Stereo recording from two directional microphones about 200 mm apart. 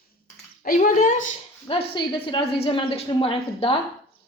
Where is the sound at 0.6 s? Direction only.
40° left (ahead or behind).